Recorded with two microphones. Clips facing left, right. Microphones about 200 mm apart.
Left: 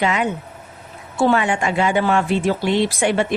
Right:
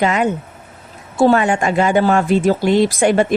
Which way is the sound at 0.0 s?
45° right (ahead or behind).